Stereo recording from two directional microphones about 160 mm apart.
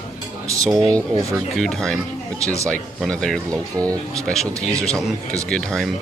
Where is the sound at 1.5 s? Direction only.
5° left (ahead or behind).